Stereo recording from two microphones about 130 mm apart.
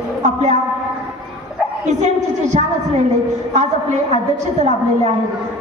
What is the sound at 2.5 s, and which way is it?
Speech, 50° right (ahead or behind).